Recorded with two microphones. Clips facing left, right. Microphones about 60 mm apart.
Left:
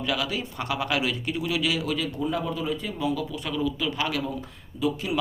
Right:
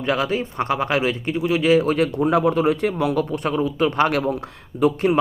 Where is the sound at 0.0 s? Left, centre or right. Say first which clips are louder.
Right 7 dB; right.